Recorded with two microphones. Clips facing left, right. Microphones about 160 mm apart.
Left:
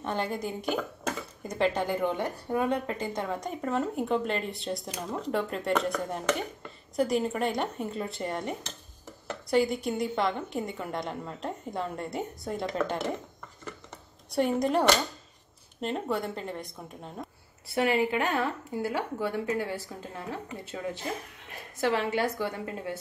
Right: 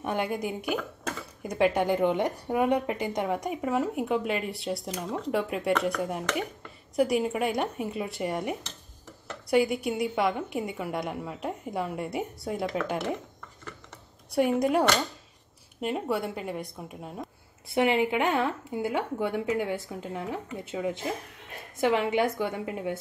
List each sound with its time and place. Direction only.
0.0 s a woman's voice: 10° right (ahead or behind)
14.3 s a woman's voice: 10° right (ahead or behind)
17.6 s a woman's voice: 20° right (ahead or behind)